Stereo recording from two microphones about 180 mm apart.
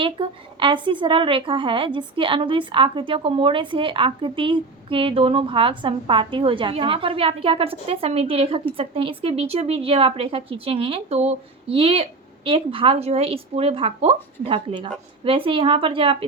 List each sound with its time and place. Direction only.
0.0 s a woman's voice: 30° right (ahead or behind)